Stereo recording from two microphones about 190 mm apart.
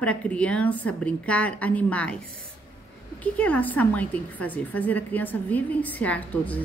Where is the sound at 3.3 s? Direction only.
5° left (ahead or behind).